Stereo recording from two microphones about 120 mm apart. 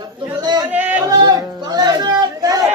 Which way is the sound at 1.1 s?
35° right (ahead or behind).